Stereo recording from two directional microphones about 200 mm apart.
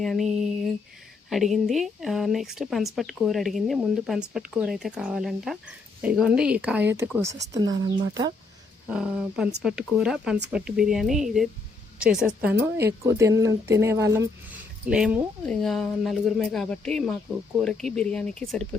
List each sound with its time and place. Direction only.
0.0 s a woman's voice: centre (ahead or behind); by 8.3 s 20° right (ahead or behind)
8.9 s a woman's voice: 5° right (ahead or behind)
14.8 s a woman's voice: 5° right (ahead or behind)